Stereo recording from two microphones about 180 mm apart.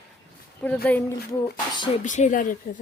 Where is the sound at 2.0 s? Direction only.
45° left (ahead or behind).